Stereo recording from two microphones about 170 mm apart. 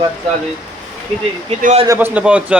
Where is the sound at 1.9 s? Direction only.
10° right (ahead or behind).